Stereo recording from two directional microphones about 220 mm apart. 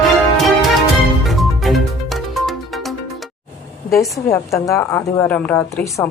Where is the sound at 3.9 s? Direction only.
15° left (ahead or behind).